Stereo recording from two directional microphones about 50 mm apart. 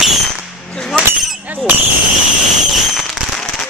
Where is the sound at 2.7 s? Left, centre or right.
Centre.